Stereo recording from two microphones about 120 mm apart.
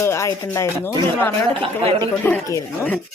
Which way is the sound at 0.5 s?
25° left (ahead or behind).